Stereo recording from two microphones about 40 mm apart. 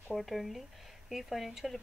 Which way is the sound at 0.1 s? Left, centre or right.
Centre.